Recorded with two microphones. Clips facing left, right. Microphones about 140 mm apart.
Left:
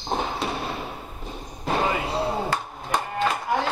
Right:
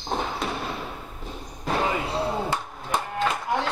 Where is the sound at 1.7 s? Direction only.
10° left (ahead or behind).